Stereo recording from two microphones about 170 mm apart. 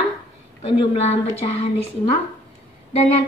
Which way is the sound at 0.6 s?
35° left (ahead or behind).